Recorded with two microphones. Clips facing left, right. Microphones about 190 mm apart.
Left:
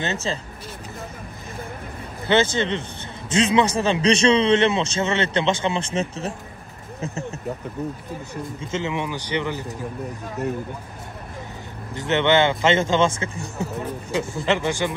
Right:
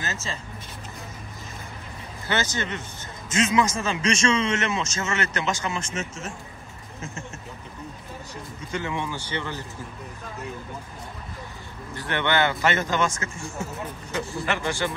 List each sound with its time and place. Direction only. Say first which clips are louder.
0.0 s a man's voice: left 7 dB; 30° left (ahead or behind)
2.2 s a man's voice: left 8 dB; 25° left (ahead or behind)
8.7 s speech: left 3 dB; 20° left (ahead or behind)
11.9 s speech: left 7 dB; 20° left (ahead or behind)
14.1 s speech: left 5 dB; 20° left (ahead or behind)